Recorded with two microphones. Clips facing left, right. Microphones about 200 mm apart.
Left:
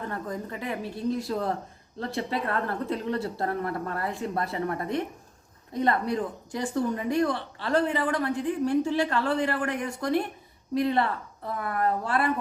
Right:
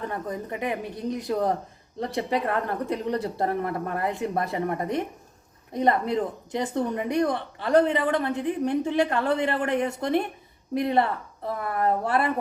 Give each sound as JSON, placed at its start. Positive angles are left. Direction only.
{"t": 0.1, "sound": "speech", "side_deg": -20}